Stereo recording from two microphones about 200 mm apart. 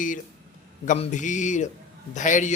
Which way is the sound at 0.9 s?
40° left (ahead or behind).